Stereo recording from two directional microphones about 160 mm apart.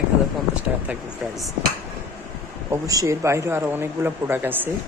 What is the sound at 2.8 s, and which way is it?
Speech, 20° right (ahead or behind).